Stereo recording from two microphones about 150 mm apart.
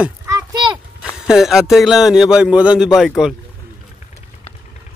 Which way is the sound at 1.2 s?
5° right (ahead or behind).